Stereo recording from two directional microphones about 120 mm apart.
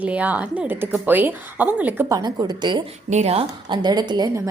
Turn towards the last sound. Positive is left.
turn(degrees=-35)  # may be behind; listen again after turning